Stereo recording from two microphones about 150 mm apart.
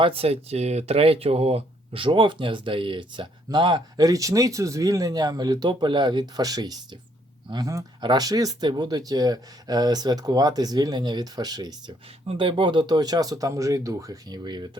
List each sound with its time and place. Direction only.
0.0 s speech: 40° right (ahead or behind)